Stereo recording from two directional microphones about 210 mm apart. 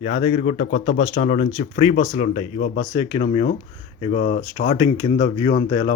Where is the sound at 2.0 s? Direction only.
25° left (ahead or behind).